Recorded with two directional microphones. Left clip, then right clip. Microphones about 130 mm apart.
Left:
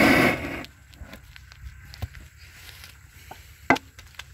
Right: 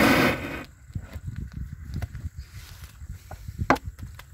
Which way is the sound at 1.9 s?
80° right.